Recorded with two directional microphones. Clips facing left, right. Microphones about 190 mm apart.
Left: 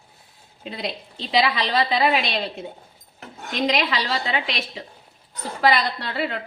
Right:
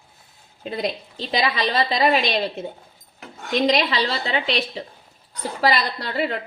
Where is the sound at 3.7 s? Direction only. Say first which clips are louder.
Even; 35° right (ahead or behind).